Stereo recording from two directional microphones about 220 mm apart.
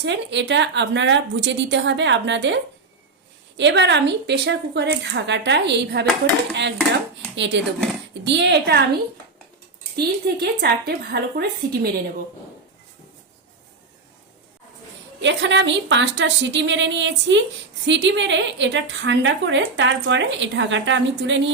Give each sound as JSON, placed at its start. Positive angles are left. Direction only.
{"t": 0.0, "sound": "a woman's voice", "side_deg": -55}
{"t": 3.6, "sound": "a woman's voice", "side_deg": -55}
{"t": 9.9, "sound": "a woman's voice", "side_deg": -45}
{"t": 15.2, "sound": "a woman's voice", "side_deg": -55}